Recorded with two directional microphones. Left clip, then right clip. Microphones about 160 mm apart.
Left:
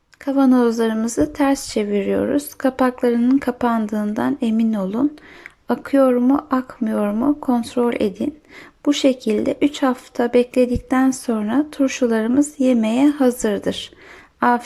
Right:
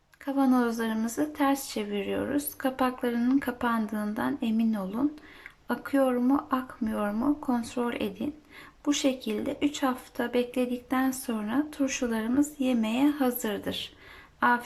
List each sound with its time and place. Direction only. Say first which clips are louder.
0.3 s speech: left 10 dB; 30° left (ahead or behind)